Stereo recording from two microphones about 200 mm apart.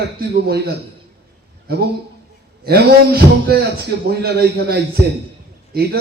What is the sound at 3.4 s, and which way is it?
A man's voice, 55° right (ahead or behind).